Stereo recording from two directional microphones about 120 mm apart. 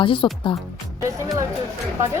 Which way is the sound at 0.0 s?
45° left (ahead or behind).